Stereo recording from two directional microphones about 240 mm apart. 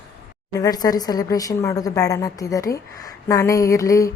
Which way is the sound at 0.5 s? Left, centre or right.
Centre.